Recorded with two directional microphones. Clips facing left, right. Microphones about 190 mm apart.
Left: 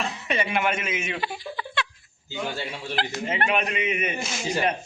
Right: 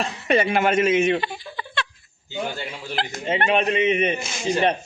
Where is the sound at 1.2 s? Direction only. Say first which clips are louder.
Even; 5° left (ahead or behind).